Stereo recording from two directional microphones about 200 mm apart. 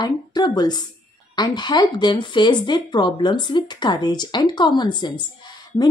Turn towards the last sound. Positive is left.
turn(degrees=20)  # may be behind; listen again after turning